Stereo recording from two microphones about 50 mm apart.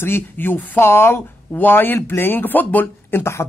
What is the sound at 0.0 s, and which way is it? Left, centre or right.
Speech, left.